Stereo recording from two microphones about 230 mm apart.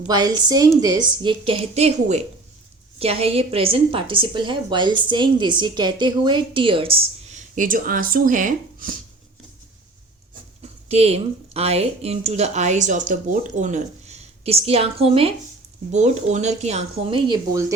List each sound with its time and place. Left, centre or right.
0.1 s a woman's voice: centre; by 9.0 s right
10.6 s a woman's voice: right